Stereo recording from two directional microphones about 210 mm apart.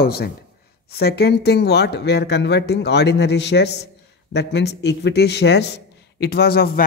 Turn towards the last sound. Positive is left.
turn(degrees=45)  # may be behind; listen again after turning